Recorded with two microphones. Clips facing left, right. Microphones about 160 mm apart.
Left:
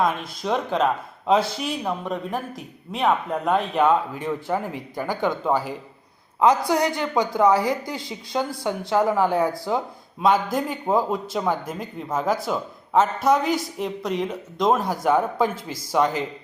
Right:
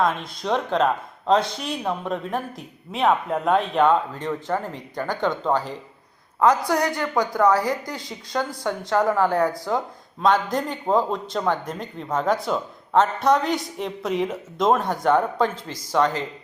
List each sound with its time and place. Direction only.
0.0 s a woman's voice: centre (ahead or behind)